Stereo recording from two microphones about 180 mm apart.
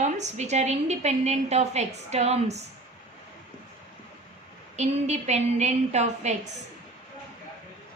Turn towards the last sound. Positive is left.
turn(degrees=-40)  # may be behind; listen again after turning